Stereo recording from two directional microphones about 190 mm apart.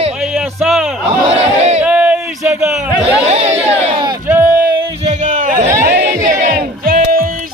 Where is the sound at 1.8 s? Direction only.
5° right (ahead or behind).